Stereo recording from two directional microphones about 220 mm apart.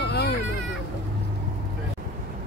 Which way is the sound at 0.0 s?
50° left (ahead or behind).